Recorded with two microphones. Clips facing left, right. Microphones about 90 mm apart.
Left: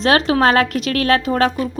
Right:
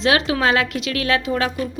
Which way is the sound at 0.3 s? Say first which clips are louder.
Left 4 dB; 45° left (ahead or behind).